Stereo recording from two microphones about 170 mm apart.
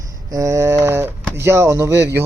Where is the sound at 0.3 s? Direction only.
20° right (ahead or behind).